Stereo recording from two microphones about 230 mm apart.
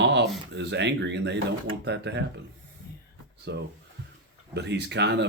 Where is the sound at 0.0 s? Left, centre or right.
Right.